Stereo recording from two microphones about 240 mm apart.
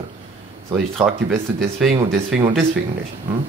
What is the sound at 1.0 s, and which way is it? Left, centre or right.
Speech, centre.